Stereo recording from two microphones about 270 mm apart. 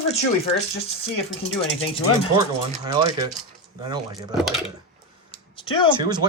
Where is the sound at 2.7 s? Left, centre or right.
Centre.